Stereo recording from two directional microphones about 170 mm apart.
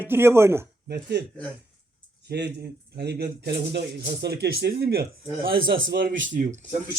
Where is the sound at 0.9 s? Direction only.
70° right (ahead or behind).